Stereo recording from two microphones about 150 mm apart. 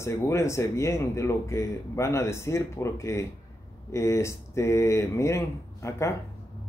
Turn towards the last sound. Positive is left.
turn(degrees=20)  # may be behind; listen again after turning